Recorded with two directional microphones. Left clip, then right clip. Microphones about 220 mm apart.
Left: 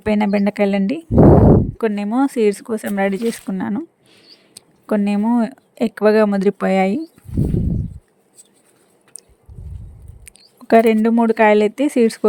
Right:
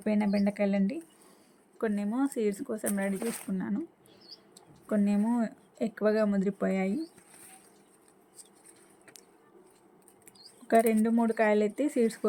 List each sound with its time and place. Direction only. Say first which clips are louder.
0.0 s speech: left 12 dB; 45° left (ahead or behind)
10.2 s speech: left 14 dB; 40° left (ahead or behind)